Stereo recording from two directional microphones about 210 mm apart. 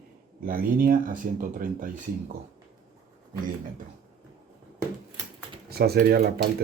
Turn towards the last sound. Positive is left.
turn(degrees=-50)  # may be behind; listen again after turning